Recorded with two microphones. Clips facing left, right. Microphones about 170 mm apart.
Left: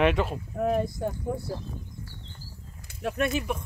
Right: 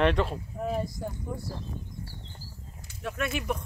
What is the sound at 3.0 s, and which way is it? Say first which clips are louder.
Speech: left 5 dB; 40° left (ahead or behind).